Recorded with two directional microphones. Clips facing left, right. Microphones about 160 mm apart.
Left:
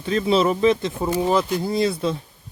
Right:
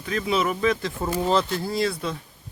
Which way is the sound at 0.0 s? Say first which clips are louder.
Left 5 dB; 25° left (ahead or behind).